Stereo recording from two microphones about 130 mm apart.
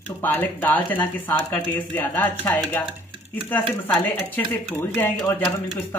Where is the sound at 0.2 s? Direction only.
15° left (ahead or behind).